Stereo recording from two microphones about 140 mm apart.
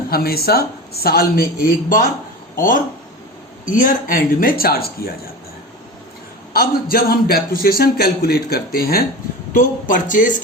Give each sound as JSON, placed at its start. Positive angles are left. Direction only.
{"t": 0.1, "sound": "a man's voice", "side_deg": 90}
{"t": 2.6, "sound": "a man's voice", "side_deg": 75}
{"t": 6.5, "sound": "a man's voice", "side_deg": 90}
{"t": 9.6, "sound": "speech", "side_deg": 70}